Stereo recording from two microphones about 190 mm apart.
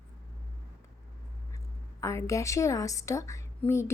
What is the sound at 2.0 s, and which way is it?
A woman's voice, 15° left (ahead or behind).